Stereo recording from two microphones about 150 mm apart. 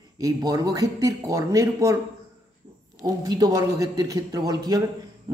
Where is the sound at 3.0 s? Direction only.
25° right (ahead or behind).